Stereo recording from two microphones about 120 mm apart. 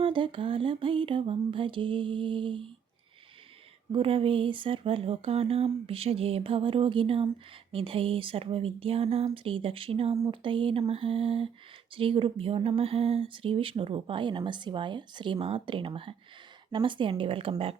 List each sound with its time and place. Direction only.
0.0 s speech: 45° right (ahead or behind)
3.9 s speech: 50° right (ahead or behind)